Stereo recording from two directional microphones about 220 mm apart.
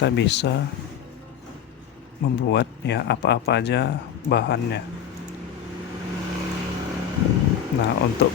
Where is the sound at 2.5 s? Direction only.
50° left (ahead or behind).